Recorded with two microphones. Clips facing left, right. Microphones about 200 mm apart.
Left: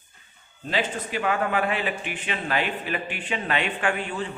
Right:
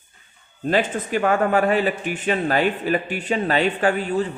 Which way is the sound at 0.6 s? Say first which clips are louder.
Right 7 dB; 50° right (ahead or behind).